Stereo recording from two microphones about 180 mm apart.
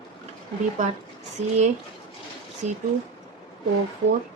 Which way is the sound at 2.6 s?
40° right (ahead or behind).